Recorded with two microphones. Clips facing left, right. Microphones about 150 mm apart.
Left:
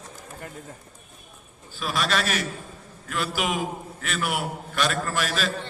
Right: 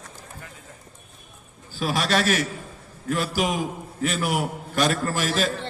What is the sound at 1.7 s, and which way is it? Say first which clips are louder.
A man's voice: right 3 dB; 45° right (ahead or behind).